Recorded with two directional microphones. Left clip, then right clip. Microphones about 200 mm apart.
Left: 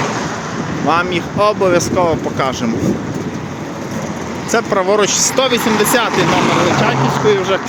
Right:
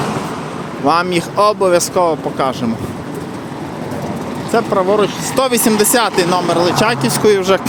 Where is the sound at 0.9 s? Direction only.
25° right (ahead or behind).